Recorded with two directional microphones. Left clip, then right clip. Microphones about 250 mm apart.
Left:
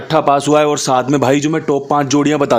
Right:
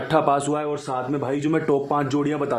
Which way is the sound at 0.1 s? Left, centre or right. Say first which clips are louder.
Left 9 dB; left.